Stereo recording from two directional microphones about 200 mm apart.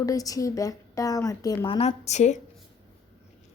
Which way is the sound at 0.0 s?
15° left (ahead or behind).